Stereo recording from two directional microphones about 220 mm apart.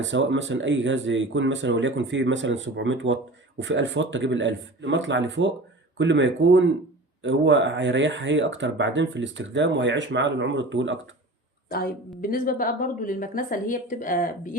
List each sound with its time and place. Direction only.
0.0 s speech: 55° right (ahead or behind)
11.7 s a woman's voice: 45° left (ahead or behind)